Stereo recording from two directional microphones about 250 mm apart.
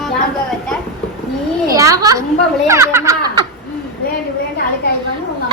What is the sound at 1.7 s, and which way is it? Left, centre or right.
Speech, centre.